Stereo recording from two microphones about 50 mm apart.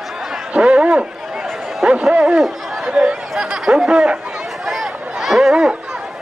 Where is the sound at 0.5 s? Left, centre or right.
Right.